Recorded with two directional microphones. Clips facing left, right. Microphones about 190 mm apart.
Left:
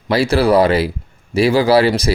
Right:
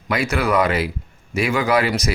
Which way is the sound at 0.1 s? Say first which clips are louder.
Left 7 dB; 30° left (ahead or behind).